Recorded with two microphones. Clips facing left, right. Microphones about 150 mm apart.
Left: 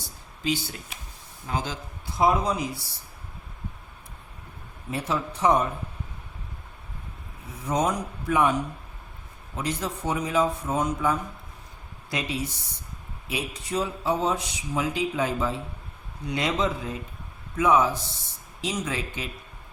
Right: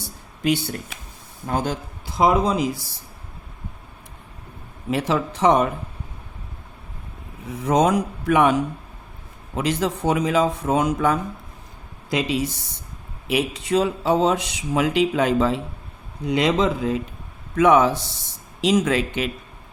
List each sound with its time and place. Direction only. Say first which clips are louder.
0.4 s speech: right 7 dB; 60° right (ahead or behind); by 2.7 s 90° right
4.9 s speech: right 7 dB; 90° right
7.5 s speech: right 7 dB; 90° right
9.6 s speech: right 7 dB; 90° right
14.7 s speech: right 7 dB; 75° right (ahead or behind)
16.3 s speech: right 7 dB; 90° right
17.6 s speech: right 6 dB; 75° right (ahead or behind)